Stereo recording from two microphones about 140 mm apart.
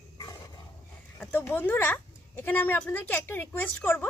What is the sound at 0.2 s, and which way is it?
Dog, 25° left (ahead or behind).